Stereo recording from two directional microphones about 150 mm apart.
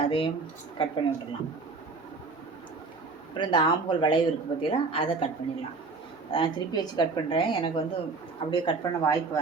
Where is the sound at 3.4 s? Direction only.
30° left (ahead or behind).